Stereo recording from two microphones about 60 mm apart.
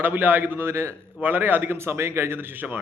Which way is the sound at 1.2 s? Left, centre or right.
Right.